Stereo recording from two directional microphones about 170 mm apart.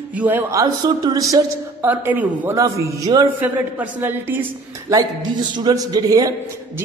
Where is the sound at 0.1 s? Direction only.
10° right (ahead or behind).